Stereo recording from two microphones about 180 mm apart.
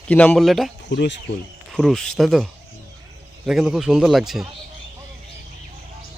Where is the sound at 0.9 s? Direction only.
70° left (ahead or behind).